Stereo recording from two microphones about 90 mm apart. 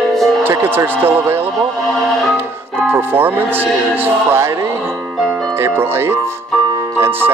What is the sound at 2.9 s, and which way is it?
Speech, 25° right (ahead or behind).